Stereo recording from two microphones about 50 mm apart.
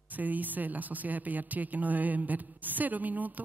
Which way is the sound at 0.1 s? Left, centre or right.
Right.